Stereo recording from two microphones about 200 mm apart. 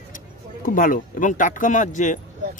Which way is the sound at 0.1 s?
45° left (ahead or behind).